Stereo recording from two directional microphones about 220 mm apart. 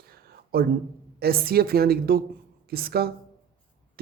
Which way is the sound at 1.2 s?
45° right (ahead or behind).